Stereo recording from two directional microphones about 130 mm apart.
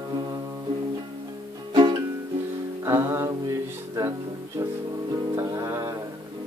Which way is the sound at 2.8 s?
20° right (ahead or behind).